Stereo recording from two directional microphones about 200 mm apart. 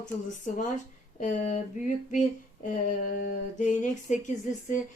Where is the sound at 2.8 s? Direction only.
40° left (ahead or behind).